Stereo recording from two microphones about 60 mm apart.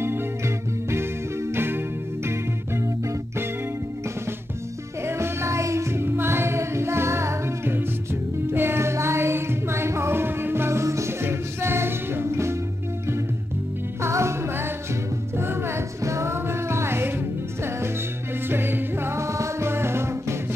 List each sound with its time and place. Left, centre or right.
1.5 s music: right
5.0 s music: right
14.0 s music: right
16.0 s music: right
18.5 s music: right